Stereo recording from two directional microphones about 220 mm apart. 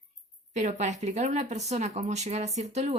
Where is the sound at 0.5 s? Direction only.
30° right (ahead or behind).